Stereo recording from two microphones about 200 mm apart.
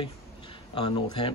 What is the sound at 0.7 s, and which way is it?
Speech, 25° left (ahead or behind).